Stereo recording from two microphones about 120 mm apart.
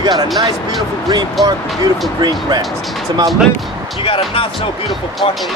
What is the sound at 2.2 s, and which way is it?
Speech, 35° right (ahead or behind).